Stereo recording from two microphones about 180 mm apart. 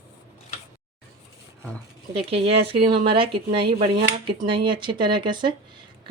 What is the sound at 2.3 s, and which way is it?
Speech, 30° right (ahead or behind).